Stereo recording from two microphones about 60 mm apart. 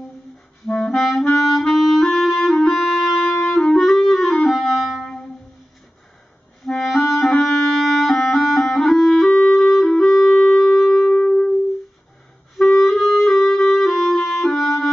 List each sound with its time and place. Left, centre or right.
0.7 s clarinet: centre
4.5 s clarinet: centre
6.6 s clarinet: centre
9.9 s music: centre
11.1 s music: centre
12.5 s clarinet: centre